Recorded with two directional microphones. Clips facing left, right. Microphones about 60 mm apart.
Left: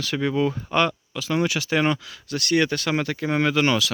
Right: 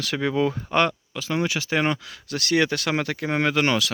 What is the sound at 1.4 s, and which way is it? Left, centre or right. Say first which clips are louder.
Speech: left 1 dB; right.